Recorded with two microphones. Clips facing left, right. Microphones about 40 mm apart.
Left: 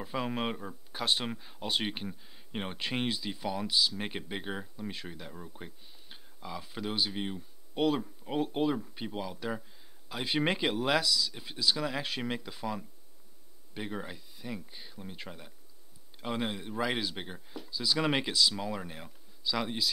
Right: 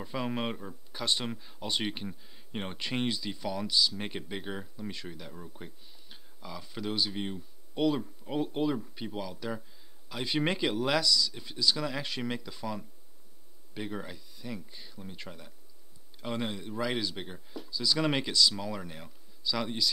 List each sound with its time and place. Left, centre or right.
0.0 s speech: centre